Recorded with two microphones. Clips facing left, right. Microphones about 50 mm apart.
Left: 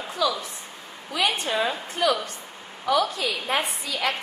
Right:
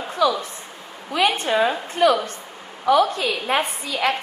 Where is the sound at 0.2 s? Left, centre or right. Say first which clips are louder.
Right 6 dB; right.